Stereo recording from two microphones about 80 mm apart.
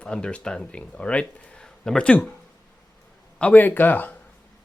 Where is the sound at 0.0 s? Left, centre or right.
Centre.